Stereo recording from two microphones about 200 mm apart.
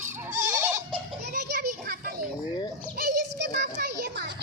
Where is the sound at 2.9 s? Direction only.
50° right (ahead or behind).